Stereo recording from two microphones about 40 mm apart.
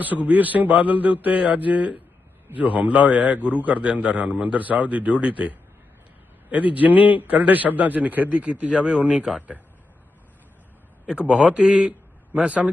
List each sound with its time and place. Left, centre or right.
0.0 s a man's voice: right
11.0 s a man's voice: right
11.6 s a man's voice: centre